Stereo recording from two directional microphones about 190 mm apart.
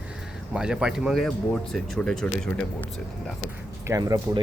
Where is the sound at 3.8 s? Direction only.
15° right (ahead or behind).